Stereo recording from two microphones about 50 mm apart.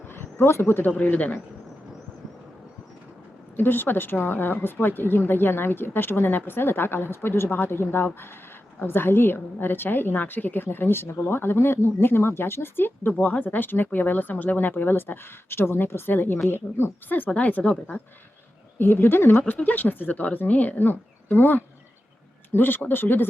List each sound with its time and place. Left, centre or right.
0.1 s a sound: left
0.5 s a woman's voice: left
0.9 s speech: left
3.6 s a woman's voice: left
17.2 s a woman's voice: left
18.8 s a woman's voice: left